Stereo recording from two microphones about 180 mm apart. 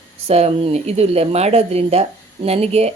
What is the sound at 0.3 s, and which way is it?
Speech, 35° right (ahead or behind).